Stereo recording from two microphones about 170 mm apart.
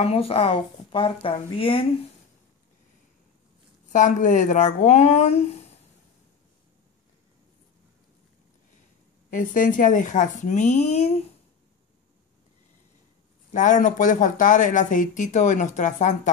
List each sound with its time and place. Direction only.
0.0 s a woman's voice: 35° left (ahead or behind)
3.9 s a woman's voice: 45° left (ahead or behind)
9.3 s speech: 50° left (ahead or behind)
13.5 s speech: 50° left (ahead or behind)